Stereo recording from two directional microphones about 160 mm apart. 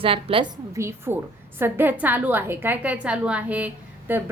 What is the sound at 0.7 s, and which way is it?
A woman's voice, 15° right (ahead or behind).